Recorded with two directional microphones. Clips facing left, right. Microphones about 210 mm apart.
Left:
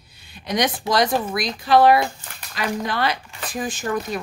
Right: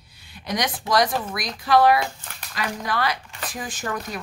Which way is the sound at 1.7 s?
25° left (ahead or behind).